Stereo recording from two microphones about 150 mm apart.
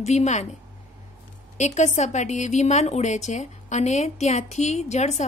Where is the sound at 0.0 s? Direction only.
50° left (ahead or behind).